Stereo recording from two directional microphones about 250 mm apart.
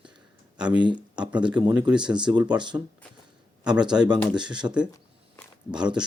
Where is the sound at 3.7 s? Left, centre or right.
Centre.